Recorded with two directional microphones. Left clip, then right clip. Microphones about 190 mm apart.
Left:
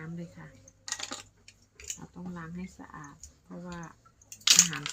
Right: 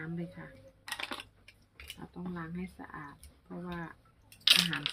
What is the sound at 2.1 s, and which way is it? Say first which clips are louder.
Speech: right 1 dB; centre (ahead or behind).